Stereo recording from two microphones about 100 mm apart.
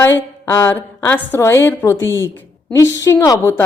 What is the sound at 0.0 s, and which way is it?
A woman's voice, 25° left (ahead or behind).